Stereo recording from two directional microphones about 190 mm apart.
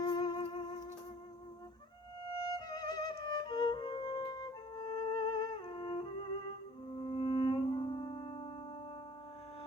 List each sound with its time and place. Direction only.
0.0 s music: 20° left (ahead or behind)
2.3 s music: 20° left (ahead or behind)